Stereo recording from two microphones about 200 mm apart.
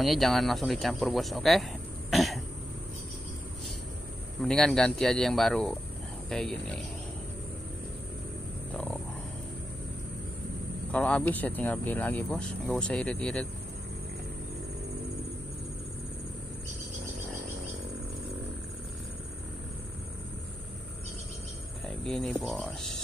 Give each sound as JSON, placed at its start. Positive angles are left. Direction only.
{"t": 0.0, "sound": "speech", "side_deg": 0}
{"t": 4.4, "sound": "speech", "side_deg": 5}
{"t": 8.7, "sound": "wild animals", "side_deg": 5}
{"t": 10.9, "sound": "speech", "side_deg": 5}
{"t": 21.8, "sound": "speech", "side_deg": 5}